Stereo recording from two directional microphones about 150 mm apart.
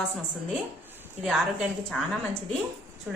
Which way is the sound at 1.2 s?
Centre (ahead or behind).